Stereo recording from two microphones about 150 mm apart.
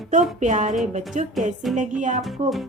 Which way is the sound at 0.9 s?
55° right (ahead or behind).